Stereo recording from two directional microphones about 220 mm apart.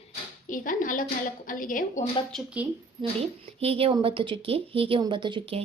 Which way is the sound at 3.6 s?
25° right (ahead or behind).